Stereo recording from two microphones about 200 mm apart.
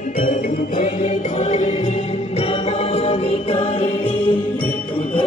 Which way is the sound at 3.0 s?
30° left (ahead or behind).